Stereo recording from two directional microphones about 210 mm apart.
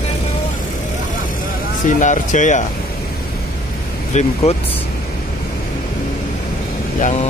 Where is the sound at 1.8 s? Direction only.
35° left (ahead or behind).